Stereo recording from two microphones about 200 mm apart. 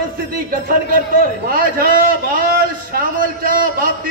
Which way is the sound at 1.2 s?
45° right (ahead or behind).